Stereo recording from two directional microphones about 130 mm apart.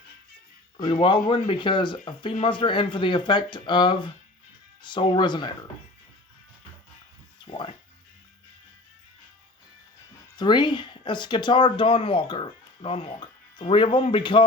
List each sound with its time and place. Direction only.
0.8 s speech: 40° left (ahead or behind)
7.4 s speech: 45° left (ahead or behind)
10.3 s speech: 35° left (ahead or behind)